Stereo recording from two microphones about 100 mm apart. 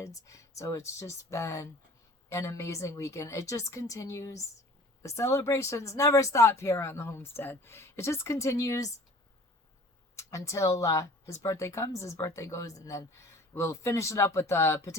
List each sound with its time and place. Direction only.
0.0 s a woman's voice: 35° left (ahead or behind)
10.2 s speech: 30° left (ahead or behind)